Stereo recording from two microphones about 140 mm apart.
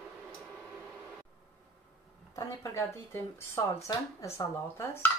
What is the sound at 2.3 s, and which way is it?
Speech, 20° left (ahead or behind).